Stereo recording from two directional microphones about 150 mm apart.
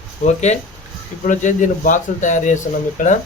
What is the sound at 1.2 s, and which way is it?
A man's voice, 55° left (ahead or behind).